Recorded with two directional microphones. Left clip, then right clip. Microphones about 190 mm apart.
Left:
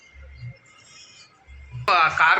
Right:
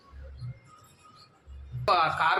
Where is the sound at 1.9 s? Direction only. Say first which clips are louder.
Left 7 dB; centre (ahead or behind).